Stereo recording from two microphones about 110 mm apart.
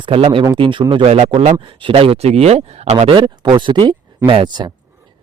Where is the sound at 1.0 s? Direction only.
80° right.